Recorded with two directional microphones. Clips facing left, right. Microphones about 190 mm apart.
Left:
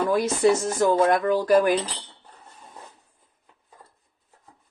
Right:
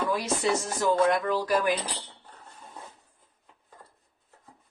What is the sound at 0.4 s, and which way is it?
Speech, 50° left (ahead or behind).